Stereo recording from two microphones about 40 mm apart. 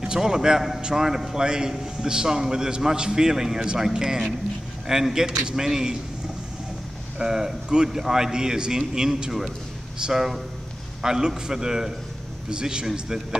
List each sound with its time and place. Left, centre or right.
0.0 s a man's voice: centre
7.2 s a man's voice: centre